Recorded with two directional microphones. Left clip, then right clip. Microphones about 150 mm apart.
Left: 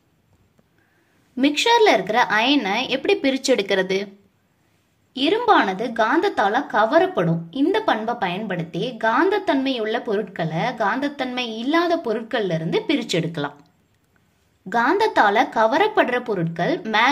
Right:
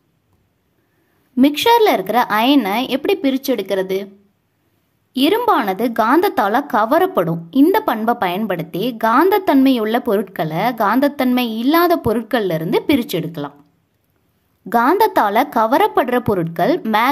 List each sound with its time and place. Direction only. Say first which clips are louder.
1.3 s a woman's voice: right 4 dB; 40° right (ahead or behind); by 4.1 s 25° right (ahead or behind)
5.1 s speech: right 2 dB; 40° right (ahead or behind)
13.0 s speech: right 1 dB; 25° right (ahead or behind)
14.7 s a woman's voice: right 5 dB; 40° right (ahead or behind)